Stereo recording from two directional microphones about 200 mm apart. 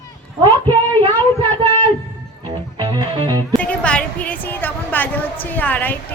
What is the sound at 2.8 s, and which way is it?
Music, 20° right (ahead or behind).